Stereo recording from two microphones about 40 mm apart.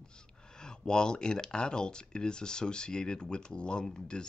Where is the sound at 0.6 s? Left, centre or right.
Centre.